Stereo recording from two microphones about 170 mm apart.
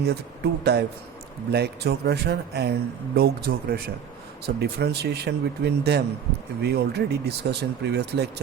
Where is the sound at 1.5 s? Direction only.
75° right (ahead or behind).